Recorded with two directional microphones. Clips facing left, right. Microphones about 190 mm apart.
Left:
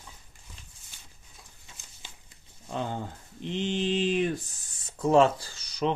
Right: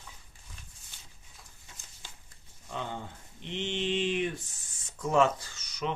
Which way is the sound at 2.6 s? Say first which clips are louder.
Left 5 dB; 40° left (ahead or behind).